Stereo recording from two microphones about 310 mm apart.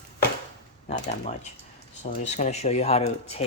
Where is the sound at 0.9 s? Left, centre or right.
Left.